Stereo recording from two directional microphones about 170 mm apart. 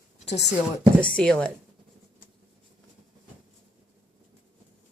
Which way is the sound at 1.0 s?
5° left (ahead or behind).